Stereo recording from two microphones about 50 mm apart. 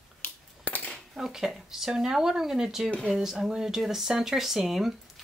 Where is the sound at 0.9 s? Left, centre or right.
Centre.